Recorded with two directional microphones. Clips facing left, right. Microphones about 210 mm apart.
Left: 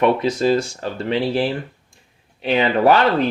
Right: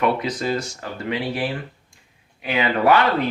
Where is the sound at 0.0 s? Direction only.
25° left (ahead or behind).